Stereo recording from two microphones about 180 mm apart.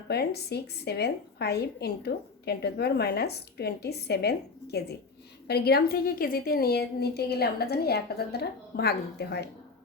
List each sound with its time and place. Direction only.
0.1 s a woman's voice: 65° left (ahead or behind)